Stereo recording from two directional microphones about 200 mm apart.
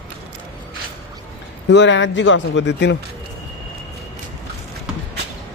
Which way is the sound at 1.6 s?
65° left (ahead or behind).